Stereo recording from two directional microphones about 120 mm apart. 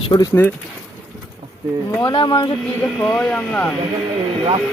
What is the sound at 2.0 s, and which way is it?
Speech, 35° left (ahead or behind).